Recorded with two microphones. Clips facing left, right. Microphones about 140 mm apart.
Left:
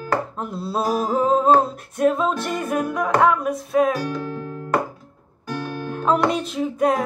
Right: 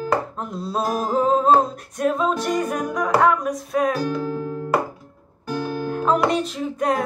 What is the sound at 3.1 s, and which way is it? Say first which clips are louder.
Music: even; centre (ahead or behind).